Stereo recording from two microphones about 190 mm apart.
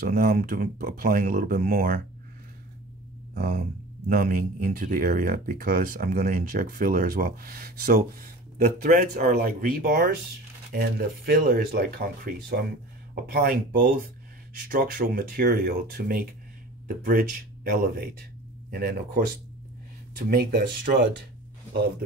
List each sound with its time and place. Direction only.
0.0 s speech: 45° right (ahead or behind)
3.3 s speech: 45° right (ahead or behind)
20.2 s speech: 50° right (ahead or behind)